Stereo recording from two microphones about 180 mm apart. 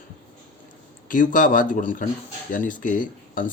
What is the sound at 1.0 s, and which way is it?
Speech, 45° left (ahead or behind).